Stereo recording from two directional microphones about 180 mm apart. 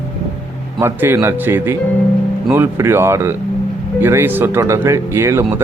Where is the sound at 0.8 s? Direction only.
15° right (ahead or behind).